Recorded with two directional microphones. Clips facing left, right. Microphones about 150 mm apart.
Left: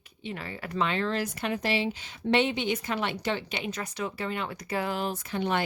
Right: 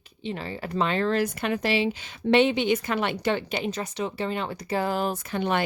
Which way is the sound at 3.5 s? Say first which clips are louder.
Right 5 dB; 35° right (ahead or behind).